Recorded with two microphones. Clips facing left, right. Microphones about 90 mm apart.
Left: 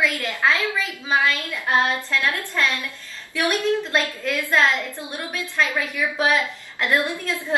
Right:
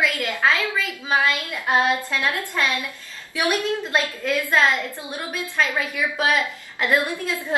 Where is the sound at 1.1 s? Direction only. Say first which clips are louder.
Even; 15° right (ahead or behind).